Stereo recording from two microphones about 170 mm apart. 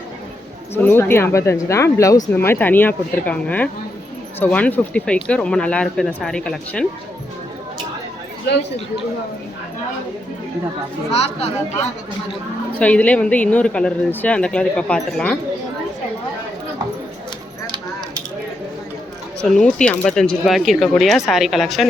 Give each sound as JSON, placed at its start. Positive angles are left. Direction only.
{"t": 0.7, "sound": "speech", "side_deg": 15}
{"t": 11.1, "sound": "speech", "side_deg": 35}
{"t": 12.8, "sound": "speech", "side_deg": 10}
{"t": 19.4, "sound": "speech", "side_deg": 5}